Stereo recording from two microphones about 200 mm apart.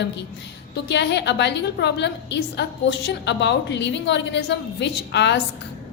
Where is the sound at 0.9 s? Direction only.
60° left (ahead or behind).